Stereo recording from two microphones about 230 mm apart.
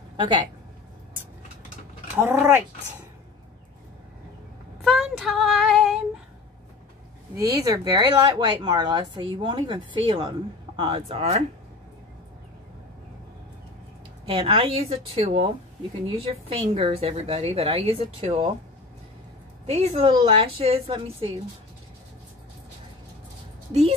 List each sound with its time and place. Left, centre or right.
0.2 s speech: centre
2.1 s mechanisms: centre
4.8 s child singing: centre
7.3 s speech: centre
14.2 s speech: right
19.6 s speech: right